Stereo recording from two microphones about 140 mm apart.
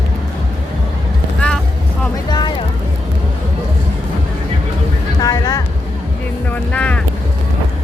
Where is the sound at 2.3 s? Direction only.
30° left (ahead or behind).